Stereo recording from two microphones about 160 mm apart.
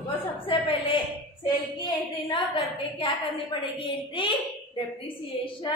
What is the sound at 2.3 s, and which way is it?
A woman's voice, 35° left (ahead or behind).